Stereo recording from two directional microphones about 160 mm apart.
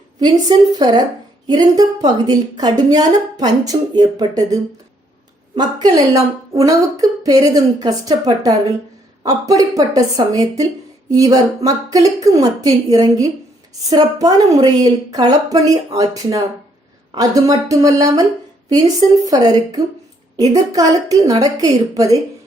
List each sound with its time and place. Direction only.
0.2 s a woman's voice: 25° right (ahead or behind)
19.2 s a woman's voice: 25° right (ahead or behind)